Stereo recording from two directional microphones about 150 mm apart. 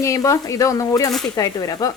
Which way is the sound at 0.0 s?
20° left (ahead or behind).